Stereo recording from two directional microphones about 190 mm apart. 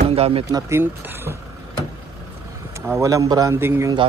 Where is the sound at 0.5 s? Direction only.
15° right (ahead or behind).